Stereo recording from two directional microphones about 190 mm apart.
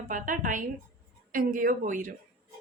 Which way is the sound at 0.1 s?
45° right (ahead or behind).